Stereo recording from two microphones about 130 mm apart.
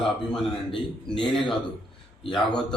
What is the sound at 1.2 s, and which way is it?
Speech, 5° left (ahead or behind).